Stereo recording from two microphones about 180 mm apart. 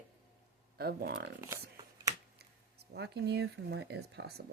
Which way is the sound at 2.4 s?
65° right (ahead or behind).